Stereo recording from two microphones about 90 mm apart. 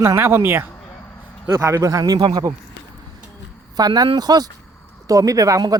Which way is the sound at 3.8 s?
45° right (ahead or behind).